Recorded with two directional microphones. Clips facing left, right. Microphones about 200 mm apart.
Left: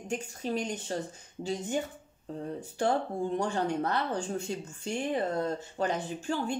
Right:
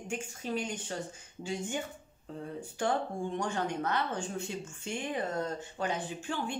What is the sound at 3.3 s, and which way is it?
Speech, 35° left (ahead or behind).